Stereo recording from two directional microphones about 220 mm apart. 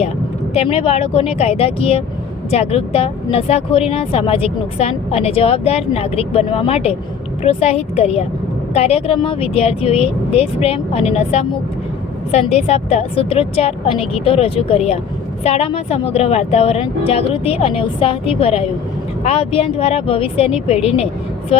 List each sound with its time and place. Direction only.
0.5 s speech: 30° left (ahead or behind)